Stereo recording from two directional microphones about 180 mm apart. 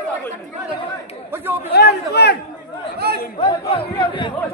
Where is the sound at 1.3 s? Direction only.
10° right (ahead or behind).